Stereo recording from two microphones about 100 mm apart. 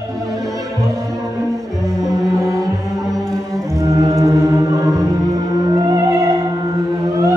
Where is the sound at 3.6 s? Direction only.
30° right (ahead or behind).